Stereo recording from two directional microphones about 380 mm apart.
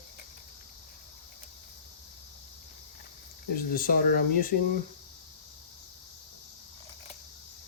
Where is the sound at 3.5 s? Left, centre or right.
Left.